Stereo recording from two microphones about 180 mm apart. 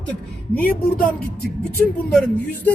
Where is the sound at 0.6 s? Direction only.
50° left (ahead or behind).